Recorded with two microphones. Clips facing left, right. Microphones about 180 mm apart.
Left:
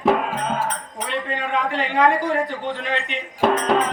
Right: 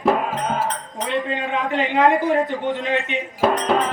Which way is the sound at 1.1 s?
20° right (ahead or behind).